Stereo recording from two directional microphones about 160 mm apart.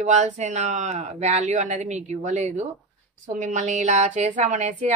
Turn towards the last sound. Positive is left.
turn(degrees=-45)  # may be behind; listen again after turning